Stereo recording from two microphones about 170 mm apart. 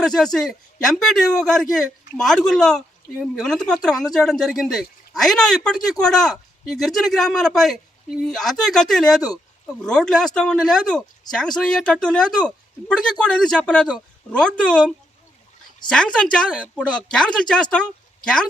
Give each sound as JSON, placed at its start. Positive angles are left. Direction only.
{"t": 0.0, "sound": "speech", "side_deg": 5}
{"t": 15.8, "sound": "a woman's voice", "side_deg": 25}
{"t": 16.1, "sound": "speech", "side_deg": 5}